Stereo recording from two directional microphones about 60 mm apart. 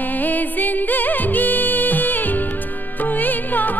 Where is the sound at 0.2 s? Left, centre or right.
Left.